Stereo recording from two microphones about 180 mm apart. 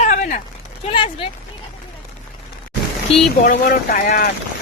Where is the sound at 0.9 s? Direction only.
30° left (ahead or behind).